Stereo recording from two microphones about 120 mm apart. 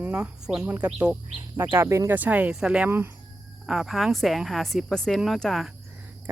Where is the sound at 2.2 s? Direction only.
15° right (ahead or behind).